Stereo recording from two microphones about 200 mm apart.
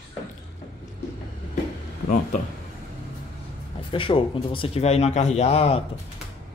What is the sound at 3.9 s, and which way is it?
Speech, 25° left (ahead or behind).